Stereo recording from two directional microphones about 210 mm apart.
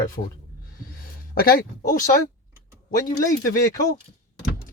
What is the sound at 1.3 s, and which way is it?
Speech, 45° left (ahead or behind).